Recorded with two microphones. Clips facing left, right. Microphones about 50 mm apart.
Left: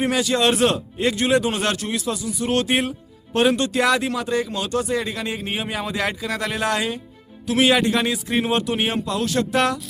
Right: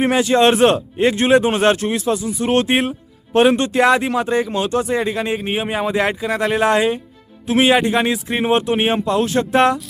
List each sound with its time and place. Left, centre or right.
0.0 s a man's voice: right